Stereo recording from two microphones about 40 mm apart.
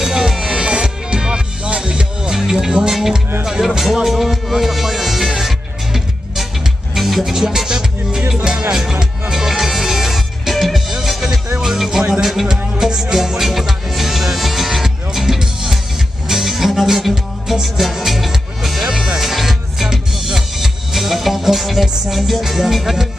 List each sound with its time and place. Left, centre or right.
0.0 s music: centre
7.0 s music: centre
9.3 s music: centre